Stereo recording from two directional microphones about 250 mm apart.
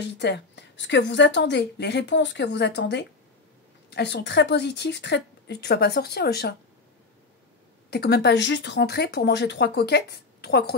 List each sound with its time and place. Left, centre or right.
0.0 s a woman's voice: left
7.9 s speech: left